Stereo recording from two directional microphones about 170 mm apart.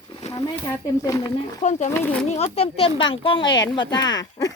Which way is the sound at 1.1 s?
20° left (ahead or behind).